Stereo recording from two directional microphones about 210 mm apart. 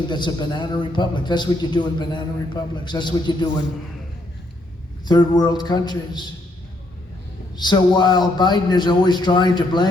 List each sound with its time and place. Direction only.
0.1 s a man's voice: 20° left (ahead or behind)
5.0 s a man's voice: 20° left (ahead or behind)
7.5 s a man's voice: 20° left (ahead or behind)